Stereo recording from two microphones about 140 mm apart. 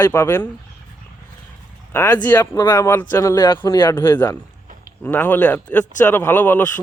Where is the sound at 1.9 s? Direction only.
15° left (ahead or behind).